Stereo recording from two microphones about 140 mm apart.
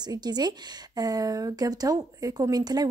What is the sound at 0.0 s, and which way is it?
A woman's voice, 30° right (ahead or behind).